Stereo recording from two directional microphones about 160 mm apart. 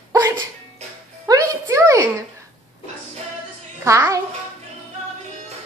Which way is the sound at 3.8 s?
20° right (ahead or behind).